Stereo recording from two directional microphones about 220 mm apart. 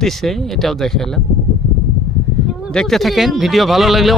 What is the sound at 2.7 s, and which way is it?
Speech, centre (ahead or behind).